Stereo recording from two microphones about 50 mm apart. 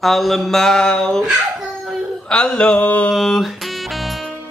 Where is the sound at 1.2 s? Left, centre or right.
Centre.